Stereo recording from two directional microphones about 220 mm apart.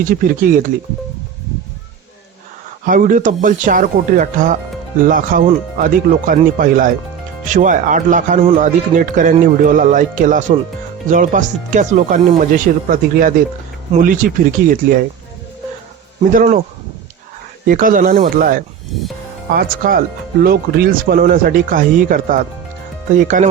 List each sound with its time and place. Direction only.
0.0 s speech: 40° right (ahead or behind)
2.8 s speech: 40° right (ahead or behind)
16.3 s speech: 35° right (ahead or behind)
17.7 s speech: 40° right (ahead or behind)